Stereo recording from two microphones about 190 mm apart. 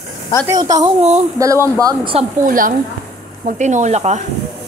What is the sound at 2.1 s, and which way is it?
Speech, 45° right (ahead or behind).